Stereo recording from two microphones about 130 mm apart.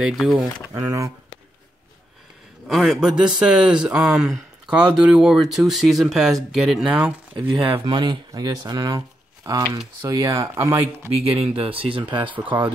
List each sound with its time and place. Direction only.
0.0 s speech: 5° right (ahead or behind)
0.7 s speech: 25° right (ahead or behind)
2.7 s speech: centre (ahead or behind)
7.6 s speech: 40° right (ahead or behind); by 11.1 s 20° right (ahead or behind)
11.2 s speech: 45° right (ahead or behind)